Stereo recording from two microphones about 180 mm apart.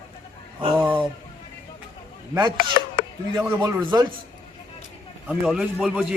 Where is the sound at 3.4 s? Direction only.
15° right (ahead or behind).